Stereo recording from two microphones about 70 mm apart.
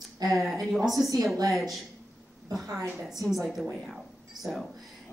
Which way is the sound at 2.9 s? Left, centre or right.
Centre.